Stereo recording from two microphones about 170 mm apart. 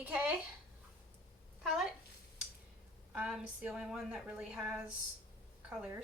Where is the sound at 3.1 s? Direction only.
5° right (ahead or behind).